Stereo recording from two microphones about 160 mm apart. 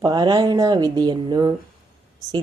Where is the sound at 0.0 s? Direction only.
30° right (ahead or behind).